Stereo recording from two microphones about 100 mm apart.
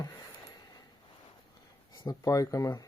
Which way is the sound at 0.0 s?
40° left (ahead or behind).